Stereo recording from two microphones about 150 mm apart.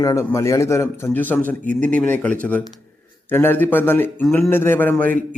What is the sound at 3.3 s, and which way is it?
Speech, 15° left (ahead or behind).